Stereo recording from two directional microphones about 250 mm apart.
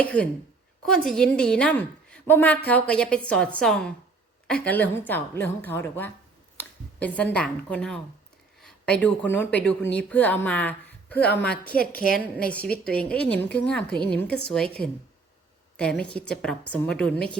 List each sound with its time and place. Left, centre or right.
0.0 s a woman's voice: centre
11.8 s a woman's voice: left
12.1 s a woman's voice: centre
15.8 s a woman's voice: centre